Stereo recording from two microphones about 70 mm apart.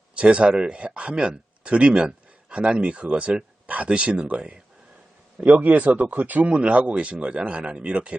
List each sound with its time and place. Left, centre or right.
0.2 s speech: centre